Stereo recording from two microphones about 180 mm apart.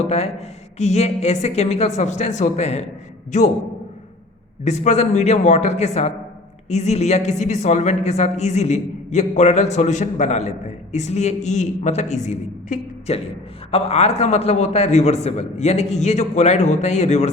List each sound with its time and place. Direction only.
0.0 s a woman's voice: 35° left (ahead or behind)
4.6 s a woman's voice: 40° left (ahead or behind)